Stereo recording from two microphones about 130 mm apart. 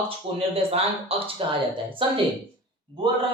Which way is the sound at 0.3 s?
50° right (ahead or behind).